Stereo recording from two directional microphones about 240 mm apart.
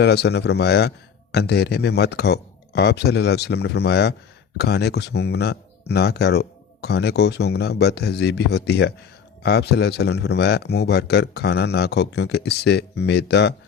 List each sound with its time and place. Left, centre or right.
0.0 s speech: left